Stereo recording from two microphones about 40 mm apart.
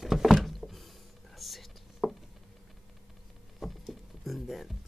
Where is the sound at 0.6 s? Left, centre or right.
Centre.